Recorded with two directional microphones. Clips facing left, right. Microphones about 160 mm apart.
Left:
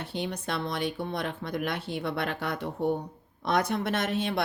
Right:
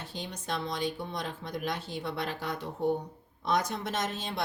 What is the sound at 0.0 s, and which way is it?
A woman's voice, 65° left (ahead or behind).